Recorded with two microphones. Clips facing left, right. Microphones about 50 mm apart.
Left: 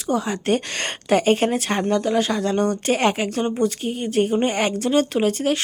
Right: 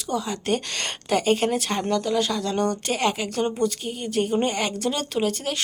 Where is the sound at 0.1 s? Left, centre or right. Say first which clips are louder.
Left 4 dB; left.